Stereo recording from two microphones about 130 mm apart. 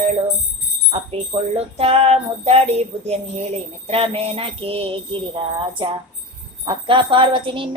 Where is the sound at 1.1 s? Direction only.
50° right (ahead or behind).